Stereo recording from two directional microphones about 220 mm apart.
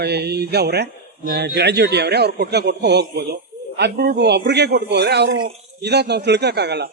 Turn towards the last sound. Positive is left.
turn(degrees=-50)  # may be behind; listen again after turning